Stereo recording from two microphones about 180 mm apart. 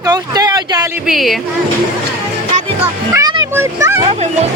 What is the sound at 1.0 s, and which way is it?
Speech, centre (ahead or behind).